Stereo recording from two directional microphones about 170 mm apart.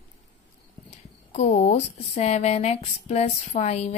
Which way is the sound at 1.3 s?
45° left (ahead or behind).